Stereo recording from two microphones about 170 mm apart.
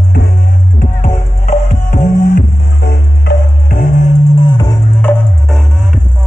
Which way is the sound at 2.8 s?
60° left (ahead or behind).